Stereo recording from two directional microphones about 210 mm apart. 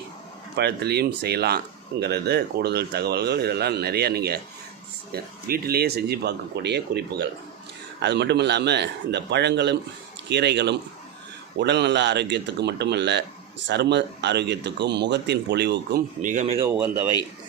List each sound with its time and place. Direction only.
0.5 s speech: 50° right (ahead or behind); by 16.6 s 35° right (ahead or behind)
16.6 s speech: 10° right (ahead or behind)